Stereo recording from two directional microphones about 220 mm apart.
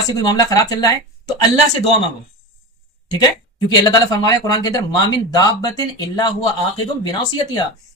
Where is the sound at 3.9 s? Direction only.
20° left (ahead or behind).